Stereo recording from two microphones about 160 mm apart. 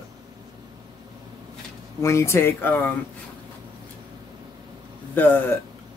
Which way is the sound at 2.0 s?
15° left (ahead or behind).